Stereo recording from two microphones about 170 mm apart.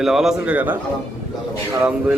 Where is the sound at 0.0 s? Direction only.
Centre (ahead or behind).